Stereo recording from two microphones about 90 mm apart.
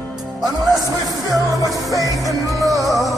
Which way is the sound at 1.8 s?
40° right (ahead or behind).